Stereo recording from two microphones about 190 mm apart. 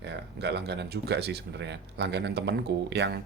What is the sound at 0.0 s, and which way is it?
Speech, 60° right (ahead or behind).